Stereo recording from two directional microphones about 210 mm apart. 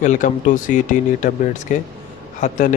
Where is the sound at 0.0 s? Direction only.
35° left (ahead or behind).